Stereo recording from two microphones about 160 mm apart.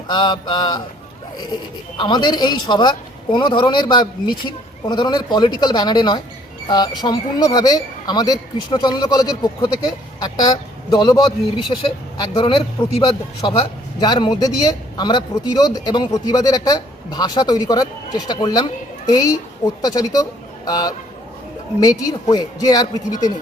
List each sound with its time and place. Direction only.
0.1 s speech: 30° left (ahead or behind)
2.0 s speech: 25° left (ahead or behind)